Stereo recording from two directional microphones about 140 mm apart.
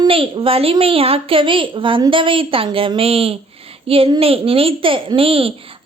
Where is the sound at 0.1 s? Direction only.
40° right (ahead or behind).